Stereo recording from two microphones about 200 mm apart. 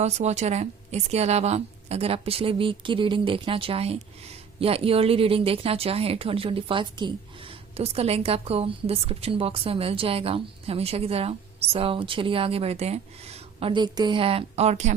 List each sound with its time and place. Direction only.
0.0 s a woman's voice: 35° right (ahead or behind)